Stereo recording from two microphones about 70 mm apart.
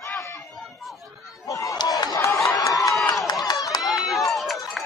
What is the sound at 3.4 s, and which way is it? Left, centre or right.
Run, left.